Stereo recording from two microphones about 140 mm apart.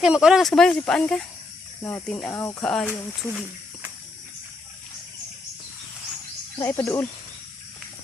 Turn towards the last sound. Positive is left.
turn(degrees=15)  # may be behind; listen again after turning